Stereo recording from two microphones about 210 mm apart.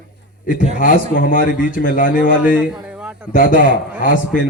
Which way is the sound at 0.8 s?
40° left (ahead or behind).